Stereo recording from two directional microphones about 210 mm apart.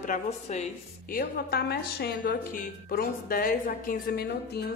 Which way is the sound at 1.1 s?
50° left (ahead or behind).